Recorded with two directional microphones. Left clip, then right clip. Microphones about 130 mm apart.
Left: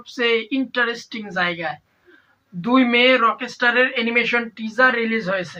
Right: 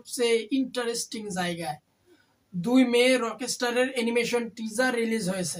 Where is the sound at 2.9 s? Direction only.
40° right (ahead or behind).